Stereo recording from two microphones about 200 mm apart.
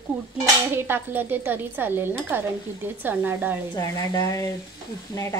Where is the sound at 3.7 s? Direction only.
20° left (ahead or behind).